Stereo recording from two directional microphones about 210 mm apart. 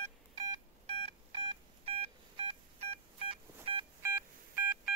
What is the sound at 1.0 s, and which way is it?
Telephone dialing, 30° right (ahead or behind).